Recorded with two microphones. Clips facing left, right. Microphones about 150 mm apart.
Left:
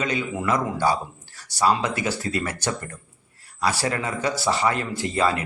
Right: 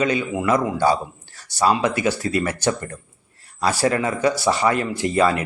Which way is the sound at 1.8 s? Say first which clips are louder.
Right 5 dB; 25° left (ahead or behind).